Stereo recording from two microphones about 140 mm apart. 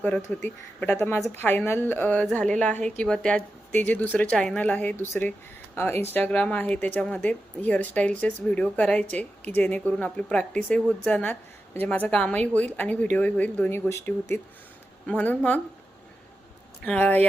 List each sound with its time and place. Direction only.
0.4 s speech: 15° left (ahead or behind)
16.8 s speech: 10° left (ahead or behind)